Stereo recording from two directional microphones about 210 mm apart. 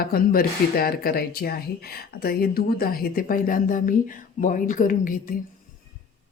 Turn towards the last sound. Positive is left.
turn(degrees=40)  # may be behind; listen again after turning